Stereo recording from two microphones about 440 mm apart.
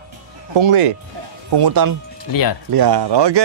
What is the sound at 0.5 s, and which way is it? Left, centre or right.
Speech, right.